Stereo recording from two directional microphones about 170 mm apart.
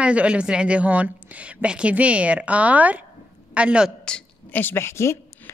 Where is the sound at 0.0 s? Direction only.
5° right (ahead or behind).